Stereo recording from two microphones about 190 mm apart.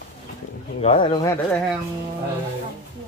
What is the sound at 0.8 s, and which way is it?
Speech, 25° left (ahead or behind).